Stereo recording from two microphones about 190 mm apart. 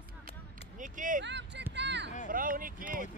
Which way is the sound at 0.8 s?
45° right (ahead or behind).